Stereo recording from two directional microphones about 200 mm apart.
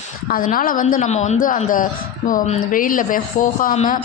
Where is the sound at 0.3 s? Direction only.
45° left (ahead or behind).